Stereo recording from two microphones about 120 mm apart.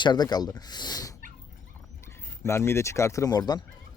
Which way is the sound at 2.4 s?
20° left (ahead or behind).